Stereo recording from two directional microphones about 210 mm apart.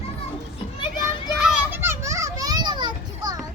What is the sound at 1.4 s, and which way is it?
Children playing, 5° right (ahead or behind).